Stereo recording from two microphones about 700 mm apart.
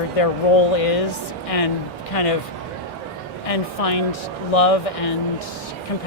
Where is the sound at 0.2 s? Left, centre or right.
Left.